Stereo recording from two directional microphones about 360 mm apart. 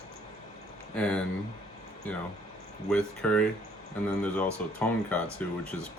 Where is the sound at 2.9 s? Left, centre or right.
Centre.